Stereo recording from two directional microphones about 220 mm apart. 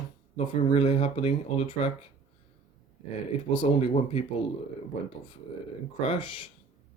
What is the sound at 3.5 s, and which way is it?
Speech, 30° left (ahead or behind).